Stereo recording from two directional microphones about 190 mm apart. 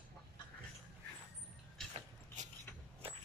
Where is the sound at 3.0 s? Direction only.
30° right (ahead or behind).